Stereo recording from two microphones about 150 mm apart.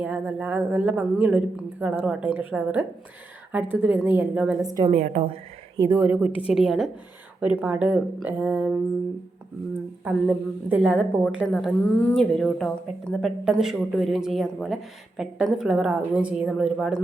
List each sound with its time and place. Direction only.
0.0 s a woman's voice: 10° right (ahead or behind)
4.8 s a woman's voice: 45° right (ahead or behind)
5.7 s a woman's voice: 25° right (ahead or behind)
6.1 s a woman's voice: 10° right (ahead or behind)
6.5 s a woman's voice: centre (ahead or behind)
10.0 s a woman's voice: 10° right (ahead or behind)
10.9 s speech: 5° left (ahead or behind)